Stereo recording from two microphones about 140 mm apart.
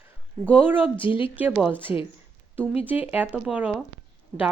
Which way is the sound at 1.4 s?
10° right (ahead or behind).